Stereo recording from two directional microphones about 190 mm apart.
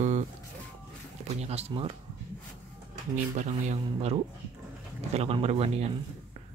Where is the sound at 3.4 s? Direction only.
40° right (ahead or behind).